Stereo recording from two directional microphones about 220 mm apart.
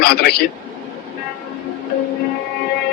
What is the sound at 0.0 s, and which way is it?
Speech, 45° left (ahead or behind).